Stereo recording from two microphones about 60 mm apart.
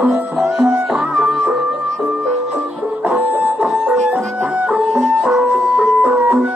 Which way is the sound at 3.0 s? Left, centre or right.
Right.